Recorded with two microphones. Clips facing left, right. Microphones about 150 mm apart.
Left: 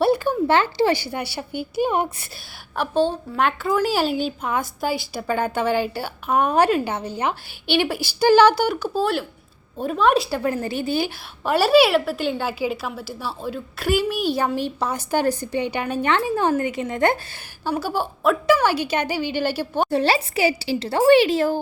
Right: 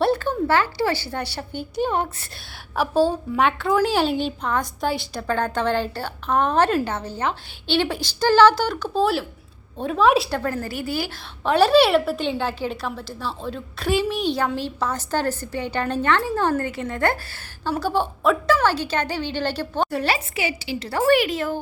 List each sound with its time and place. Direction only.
0.0 s a woman's voice: 10° left (ahead or behind)
2.7 s a woman's voice: 5° right (ahead or behind)
10.3 s speech: 20° left (ahead or behind)
11.4 s a woman's voice: 5° left (ahead or behind)
14.4 s a woman's voice: 15° left (ahead or behind)
17.7 s a woman's voice: 5° left (ahead or behind)
19.9 s speech: 30° left (ahead or behind)